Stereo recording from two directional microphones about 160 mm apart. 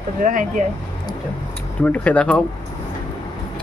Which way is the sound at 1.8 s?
10° left (ahead or behind).